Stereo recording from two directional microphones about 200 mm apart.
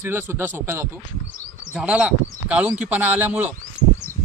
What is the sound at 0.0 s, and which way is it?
Speech, 10° right (ahead or behind).